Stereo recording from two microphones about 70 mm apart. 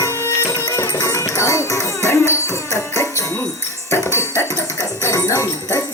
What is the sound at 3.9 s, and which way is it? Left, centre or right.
Music, left.